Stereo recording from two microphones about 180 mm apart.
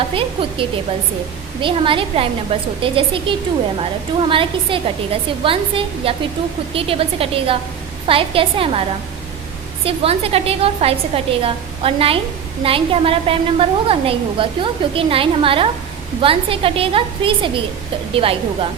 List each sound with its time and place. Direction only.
0.1 s a woman's voice: 30° right (ahead or behind)
9.8 s a woman's voice: 30° right (ahead or behind)